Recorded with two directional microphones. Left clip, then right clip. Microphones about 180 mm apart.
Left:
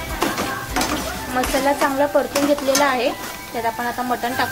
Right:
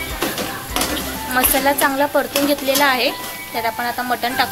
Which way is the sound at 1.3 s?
Centre (ahead or behind).